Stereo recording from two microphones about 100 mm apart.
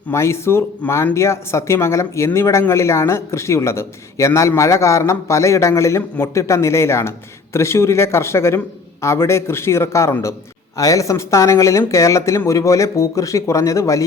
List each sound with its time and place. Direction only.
0.1 s speech: 25° left (ahead or behind)